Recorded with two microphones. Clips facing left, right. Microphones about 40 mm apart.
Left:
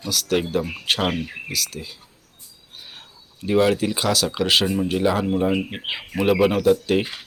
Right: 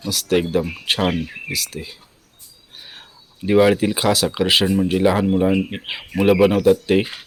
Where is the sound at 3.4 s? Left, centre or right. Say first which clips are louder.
Right 4 dB; right.